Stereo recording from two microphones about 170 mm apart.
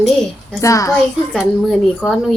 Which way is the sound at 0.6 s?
20° left (ahead or behind).